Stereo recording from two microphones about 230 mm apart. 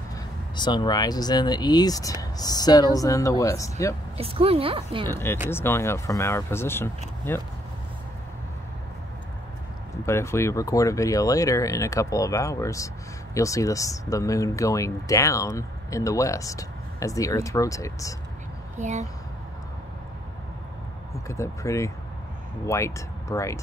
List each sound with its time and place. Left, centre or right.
0.6 s speech: centre
4.2 s a woman's voice: right
5.0 s speech: centre
10.0 s speech: centre
18.8 s speech: right
21.3 s speech: centre